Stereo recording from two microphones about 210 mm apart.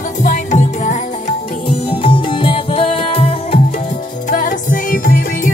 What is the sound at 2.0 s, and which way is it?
Music, 25° left (ahead or behind).